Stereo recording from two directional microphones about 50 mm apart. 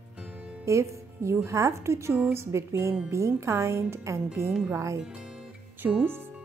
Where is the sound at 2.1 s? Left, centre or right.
Right.